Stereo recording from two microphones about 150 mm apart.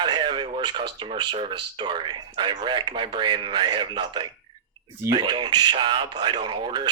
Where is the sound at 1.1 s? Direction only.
35° right (ahead or behind).